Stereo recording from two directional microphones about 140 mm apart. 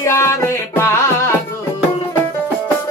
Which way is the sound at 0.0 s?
20° left (ahead or behind).